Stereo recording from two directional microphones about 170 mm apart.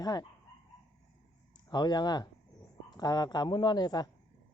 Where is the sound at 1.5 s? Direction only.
25° left (ahead or behind).